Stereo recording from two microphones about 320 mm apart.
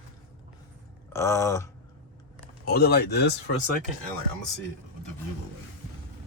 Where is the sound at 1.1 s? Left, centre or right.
Centre.